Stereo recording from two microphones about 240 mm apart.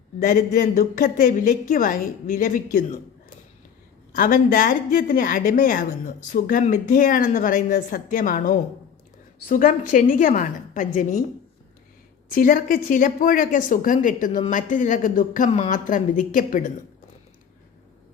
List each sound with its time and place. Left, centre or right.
0.2 s speech: left
4.1 s speech: left
12.3 s speech: left